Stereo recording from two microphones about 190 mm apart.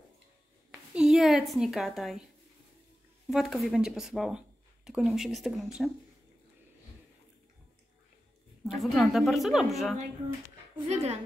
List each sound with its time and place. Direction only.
0.7 s speech: centre (ahead or behind)
3.3 s a woman's voice: centre (ahead or behind)
8.6 s a woman's voice: centre (ahead or behind)
10.9 s a woman's voice: 35° right (ahead or behind)